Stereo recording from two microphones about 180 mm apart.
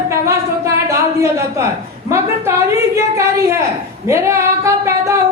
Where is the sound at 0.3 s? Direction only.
15° right (ahead or behind).